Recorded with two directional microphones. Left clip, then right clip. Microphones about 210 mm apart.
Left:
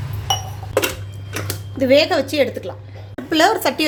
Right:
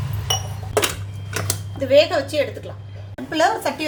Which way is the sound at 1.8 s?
50° left (ahead or behind).